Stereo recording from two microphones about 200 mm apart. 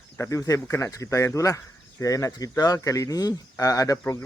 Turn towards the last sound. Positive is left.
turn(degrees=15)  # may be behind; listen again after turning